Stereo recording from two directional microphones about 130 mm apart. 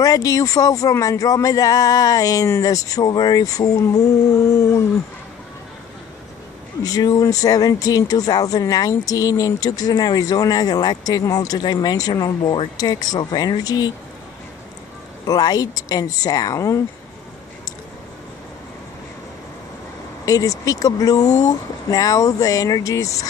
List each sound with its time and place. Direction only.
0.0 s speech: 25° left (ahead or behind)
6.8 s speech: 30° left (ahead or behind)
15.2 s speech: 30° left (ahead or behind)
20.2 s speech: 25° left (ahead or behind)